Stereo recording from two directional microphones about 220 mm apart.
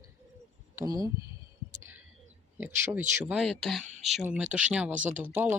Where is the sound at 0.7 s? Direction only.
15° right (ahead or behind).